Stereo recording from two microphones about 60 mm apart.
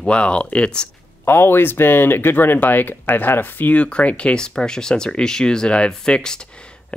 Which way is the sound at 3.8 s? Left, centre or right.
Centre.